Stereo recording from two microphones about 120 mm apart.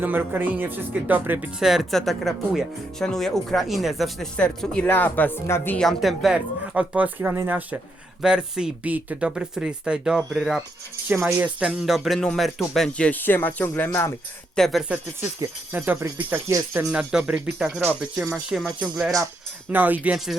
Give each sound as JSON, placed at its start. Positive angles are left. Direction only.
{"t": 0.0, "sound": "speech", "side_deg": -15}
{"t": 5.7, "sound": "speech", "side_deg": 5}
{"t": 11.1, "sound": "speech", "side_deg": -20}
{"t": 14.5, "sound": "speech", "side_deg": 0}
{"t": 14.8, "sound": "speech", "side_deg": -15}